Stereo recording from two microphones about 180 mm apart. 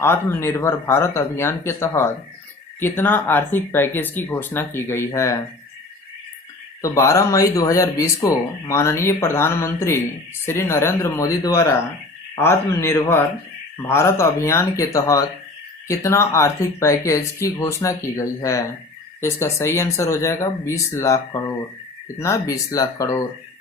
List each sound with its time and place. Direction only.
0.0 s speech: 15° left (ahead or behind)
6.8 s speech: 15° left (ahead or behind)